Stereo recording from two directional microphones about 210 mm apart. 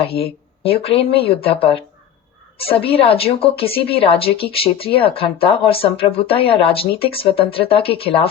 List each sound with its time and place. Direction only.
0.1 s a woman's voice: 25° left (ahead or behind)